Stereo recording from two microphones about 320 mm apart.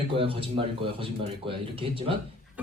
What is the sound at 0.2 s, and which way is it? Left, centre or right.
A man's voice, centre.